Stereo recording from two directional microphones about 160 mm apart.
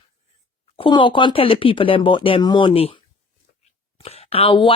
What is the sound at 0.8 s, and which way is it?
Speech, 30° left (ahead or behind).